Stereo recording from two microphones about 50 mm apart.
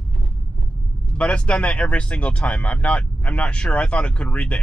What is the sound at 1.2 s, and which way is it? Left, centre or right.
Speech, left.